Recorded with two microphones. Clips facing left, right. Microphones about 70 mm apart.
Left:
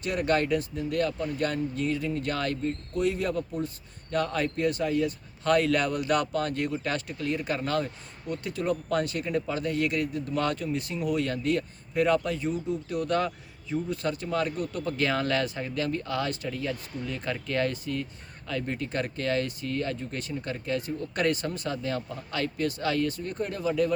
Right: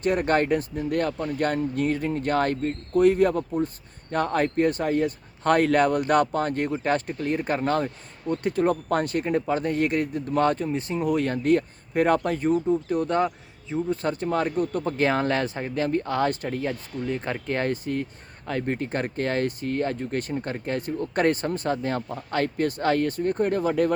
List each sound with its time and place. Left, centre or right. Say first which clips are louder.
0.0 s speech: right 4 dB; right
13.1 s a man's voice: right 3 dB; right
13.9 s speech: right 5 dB; right